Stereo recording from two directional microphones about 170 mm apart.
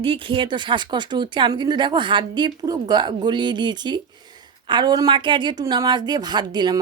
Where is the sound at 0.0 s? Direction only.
30° right (ahead or behind).